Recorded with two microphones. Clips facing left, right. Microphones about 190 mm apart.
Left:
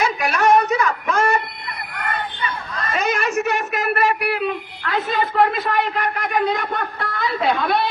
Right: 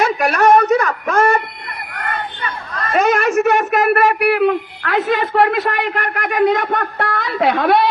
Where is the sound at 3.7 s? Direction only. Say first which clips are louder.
Right 6 dB; 75° right (ahead or behind).